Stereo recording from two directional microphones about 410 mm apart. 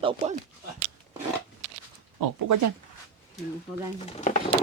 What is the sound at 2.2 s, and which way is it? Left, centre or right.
Speech, right.